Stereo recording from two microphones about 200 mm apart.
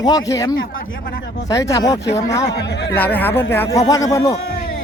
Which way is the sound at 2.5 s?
55° left (ahead or behind).